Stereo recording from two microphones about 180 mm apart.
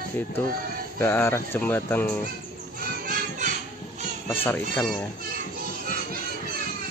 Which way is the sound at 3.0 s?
50° right (ahead or behind).